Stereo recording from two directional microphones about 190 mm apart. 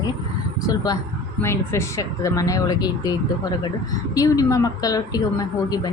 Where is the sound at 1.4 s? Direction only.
15° left (ahead or behind).